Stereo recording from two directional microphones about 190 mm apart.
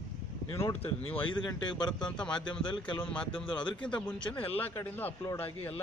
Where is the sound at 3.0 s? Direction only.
5° left (ahead or behind).